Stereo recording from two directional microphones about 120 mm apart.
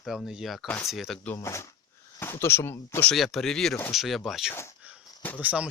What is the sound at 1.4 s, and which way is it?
Speech, 25° left (ahead or behind).